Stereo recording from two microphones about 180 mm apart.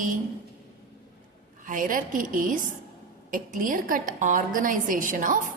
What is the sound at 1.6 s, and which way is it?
A woman's voice, 45° right (ahead or behind).